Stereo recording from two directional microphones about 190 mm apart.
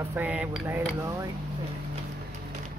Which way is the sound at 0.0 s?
10° right (ahead or behind).